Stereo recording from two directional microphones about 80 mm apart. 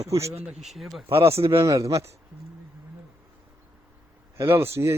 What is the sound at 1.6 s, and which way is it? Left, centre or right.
Speech, right.